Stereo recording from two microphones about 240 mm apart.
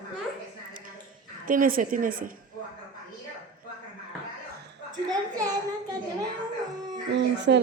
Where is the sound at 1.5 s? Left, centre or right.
Right.